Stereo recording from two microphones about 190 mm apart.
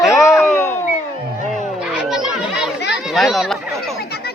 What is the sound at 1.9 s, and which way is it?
Children playing, 5° right (ahead or behind).